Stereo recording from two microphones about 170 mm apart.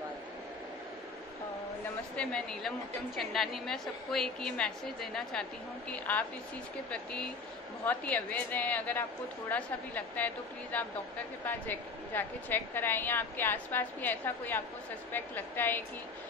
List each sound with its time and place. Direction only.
2.1 s a woman's voice: 5° left (ahead or behind)